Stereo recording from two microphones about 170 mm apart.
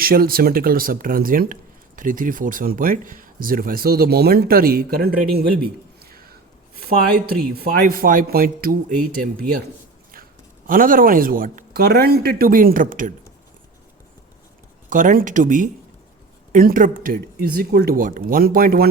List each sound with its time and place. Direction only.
0.0 s speech: 60° right (ahead or behind)
6.0 s whispering: 60° right (ahead or behind)
6.7 s speech: 65° right (ahead or behind)
10.7 s speech: 55° right (ahead or behind)
14.8 s speech: 50° right (ahead or behind)